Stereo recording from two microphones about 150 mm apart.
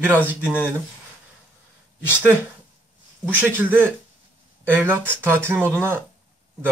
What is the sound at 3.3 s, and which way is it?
Speech, 15° right (ahead or behind).